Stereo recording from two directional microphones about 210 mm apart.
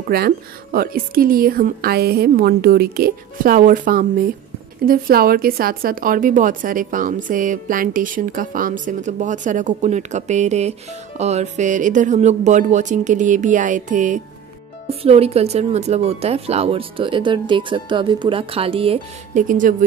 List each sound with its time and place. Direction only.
0.1 s speech: 45° right (ahead or behind); by 19.4 s 25° right (ahead or behind)
19.4 s speech: 40° right (ahead or behind)